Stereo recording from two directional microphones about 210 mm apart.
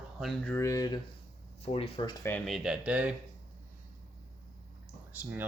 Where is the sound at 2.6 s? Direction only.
5° right (ahead or behind).